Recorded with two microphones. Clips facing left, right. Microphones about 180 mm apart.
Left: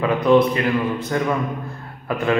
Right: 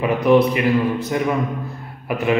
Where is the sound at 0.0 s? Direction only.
10° right (ahead or behind).